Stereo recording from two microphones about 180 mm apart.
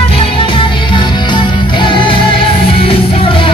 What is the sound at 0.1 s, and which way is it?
Music, 30° left (ahead or behind).